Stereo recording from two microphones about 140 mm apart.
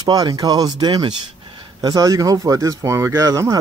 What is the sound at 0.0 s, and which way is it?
Speech, 25° right (ahead or behind).